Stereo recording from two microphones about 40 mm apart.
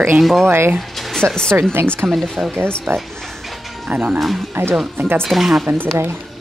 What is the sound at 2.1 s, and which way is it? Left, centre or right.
Speech, centre.